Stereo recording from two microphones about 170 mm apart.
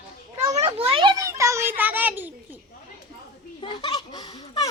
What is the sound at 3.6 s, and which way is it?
Chuckle, 25° left (ahead or behind).